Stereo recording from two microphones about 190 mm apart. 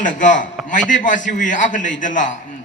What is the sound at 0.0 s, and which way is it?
A man's voice, 40° left (ahead or behind).